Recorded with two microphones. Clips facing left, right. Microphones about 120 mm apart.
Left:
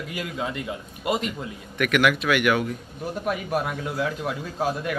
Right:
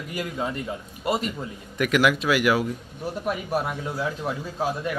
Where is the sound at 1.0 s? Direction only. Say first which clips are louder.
Even; 40° right (ahead or behind).